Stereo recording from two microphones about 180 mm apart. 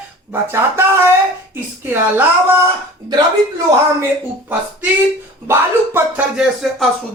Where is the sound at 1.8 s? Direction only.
10° right (ahead or behind).